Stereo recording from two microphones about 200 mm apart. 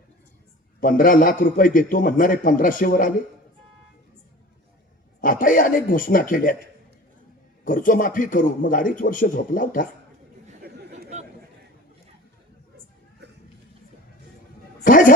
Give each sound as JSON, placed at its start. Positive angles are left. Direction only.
{"t": 0.8, "sound": "a man's voice", "side_deg": 40}
{"t": 5.2, "sound": "a man's voice", "side_deg": 45}
{"t": 7.6, "sound": "a man's voice", "side_deg": 40}
{"t": 10.6, "sound": "chatter", "side_deg": -50}
{"t": 14.8, "sound": "a sound", "side_deg": 40}